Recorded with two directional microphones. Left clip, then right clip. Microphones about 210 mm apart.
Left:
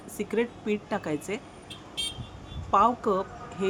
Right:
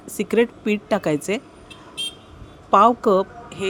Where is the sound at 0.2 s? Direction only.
35° right (ahead or behind).